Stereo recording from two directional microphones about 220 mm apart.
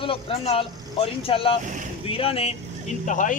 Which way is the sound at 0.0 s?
25° left (ahead or behind).